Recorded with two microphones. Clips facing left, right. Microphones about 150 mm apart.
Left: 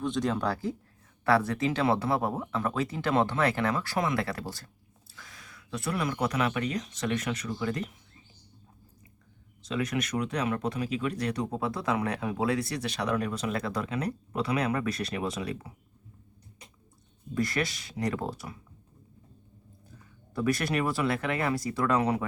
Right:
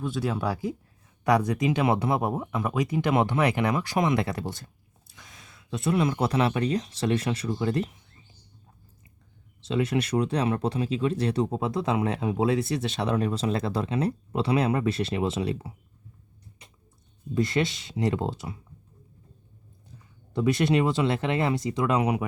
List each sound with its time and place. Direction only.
0.0 s speech: 5° right (ahead or behind); by 7.9 s 30° right (ahead or behind)
9.6 s speech: 30° right (ahead or behind)
17.3 s speech: 25° right (ahead or behind)
20.3 s speech: 25° right (ahead or behind)